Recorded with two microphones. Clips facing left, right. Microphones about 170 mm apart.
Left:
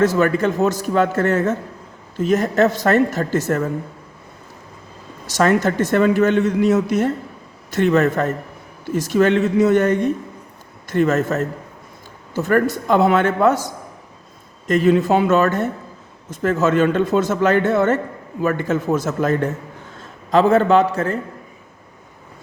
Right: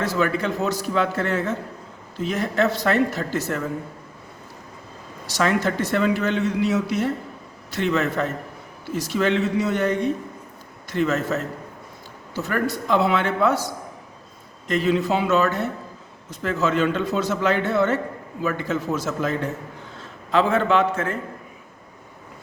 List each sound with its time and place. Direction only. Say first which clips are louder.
0.0 s speech: left 7 dB; 45° left (ahead or behind)
5.2 s speech: left 5 dB; 45° left (ahead or behind)
14.7 s a man's voice: left 6 dB; 50° left (ahead or behind)